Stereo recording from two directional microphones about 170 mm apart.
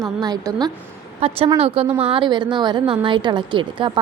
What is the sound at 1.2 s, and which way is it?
A woman's voice, 35° right (ahead or behind).